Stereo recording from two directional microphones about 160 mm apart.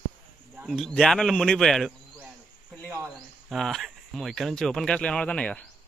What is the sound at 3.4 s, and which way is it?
Speech, centre (ahead or behind).